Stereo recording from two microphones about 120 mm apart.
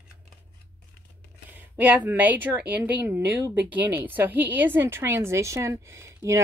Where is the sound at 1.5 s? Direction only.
15° right (ahead or behind).